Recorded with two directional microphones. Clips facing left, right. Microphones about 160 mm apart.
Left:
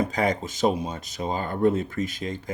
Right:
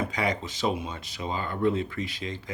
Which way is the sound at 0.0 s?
45° left (ahead or behind).